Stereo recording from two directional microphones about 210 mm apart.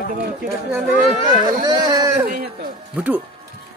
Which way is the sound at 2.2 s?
45° right (ahead or behind).